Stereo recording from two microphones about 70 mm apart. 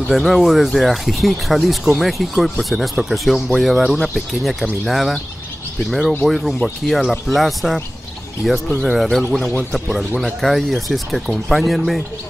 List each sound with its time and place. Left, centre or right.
0.1 s speech: centre
10.2 s speech: centre